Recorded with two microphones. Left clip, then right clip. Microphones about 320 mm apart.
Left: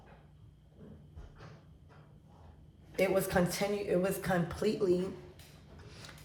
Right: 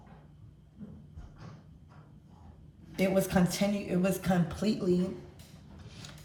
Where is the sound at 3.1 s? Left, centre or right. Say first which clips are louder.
Right 1 dB; centre.